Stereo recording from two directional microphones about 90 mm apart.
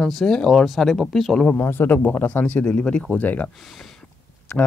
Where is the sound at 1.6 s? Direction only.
25° left (ahead or behind).